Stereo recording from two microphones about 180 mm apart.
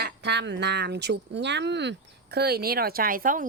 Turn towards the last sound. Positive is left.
turn(degrees=-50)  # may be behind; listen again after turning